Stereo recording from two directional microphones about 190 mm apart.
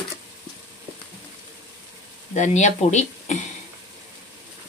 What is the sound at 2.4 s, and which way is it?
Speech, 40° left (ahead or behind).